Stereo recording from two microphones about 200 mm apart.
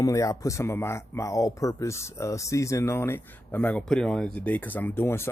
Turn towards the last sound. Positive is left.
turn(degrees=10)  # may be behind; listen again after turning